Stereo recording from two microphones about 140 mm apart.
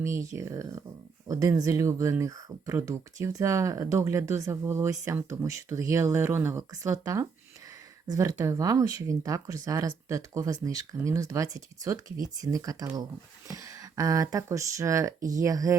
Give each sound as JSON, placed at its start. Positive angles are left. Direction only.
{"t": 0.0, "sound": "speech", "side_deg": -20}